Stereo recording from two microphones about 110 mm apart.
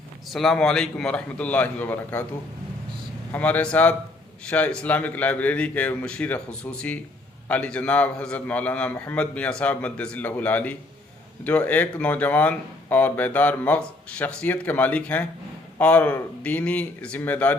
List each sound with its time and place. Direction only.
0.3 s speech: 5° left (ahead or behind)
3.3 s speech: 15° left (ahead or behind)